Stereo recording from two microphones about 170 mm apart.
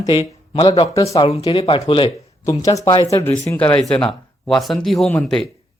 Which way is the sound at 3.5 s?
10° left (ahead or behind).